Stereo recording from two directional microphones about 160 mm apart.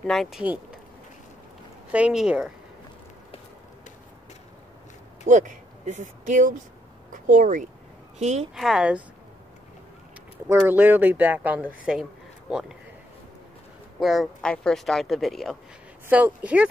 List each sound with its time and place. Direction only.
0.0 s speech: centre (ahead or behind)
1.9 s speech: 5° right (ahead or behind)
5.3 s a woman's voice: 50° right (ahead or behind)
8.5 s speech: 5° right (ahead or behind)
10.5 s speech: 15° right (ahead or behind)
13.9 s speech: centre (ahead or behind)